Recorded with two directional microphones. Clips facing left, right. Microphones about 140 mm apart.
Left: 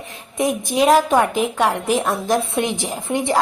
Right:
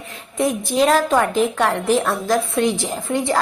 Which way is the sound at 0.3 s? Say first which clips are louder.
Even; 15° left (ahead or behind).